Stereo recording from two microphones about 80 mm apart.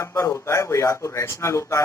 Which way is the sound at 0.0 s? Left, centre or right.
Left.